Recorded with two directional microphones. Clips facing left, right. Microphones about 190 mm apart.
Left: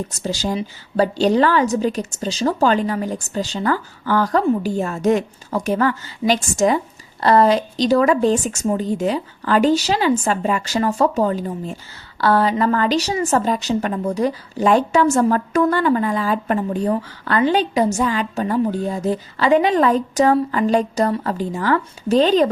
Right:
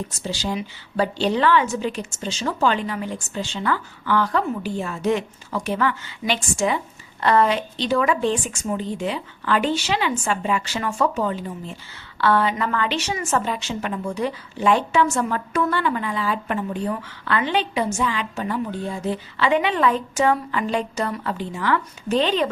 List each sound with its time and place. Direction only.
0.1 s a woman's voice: 45° left (ahead or behind)